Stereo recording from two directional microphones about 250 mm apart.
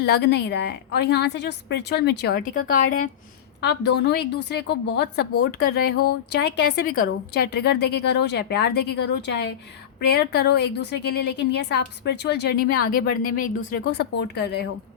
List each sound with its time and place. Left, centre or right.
0.0 s a woman's voice: left